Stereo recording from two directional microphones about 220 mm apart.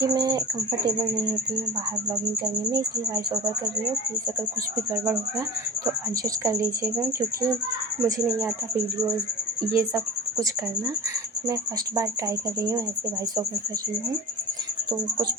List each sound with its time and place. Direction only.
0.1 s speech: 20° right (ahead or behind)
6.4 s speech: 15° right (ahead or behind)
9.7 s speech: 15° right (ahead or behind)